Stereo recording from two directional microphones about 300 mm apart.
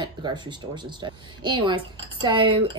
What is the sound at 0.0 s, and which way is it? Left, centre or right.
Speech, centre.